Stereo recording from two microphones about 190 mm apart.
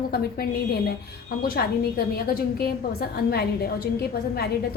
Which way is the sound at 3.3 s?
55° left (ahead or behind).